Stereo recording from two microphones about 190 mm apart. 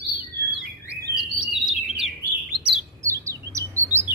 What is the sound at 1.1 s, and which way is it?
Chirp, centre (ahead or behind).